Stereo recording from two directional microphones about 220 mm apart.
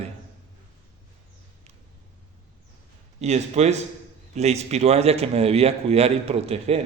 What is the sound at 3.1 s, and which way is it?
A man's voice, 30° right (ahead or behind).